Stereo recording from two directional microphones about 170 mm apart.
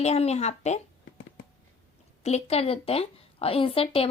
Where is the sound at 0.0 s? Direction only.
40° left (ahead or behind).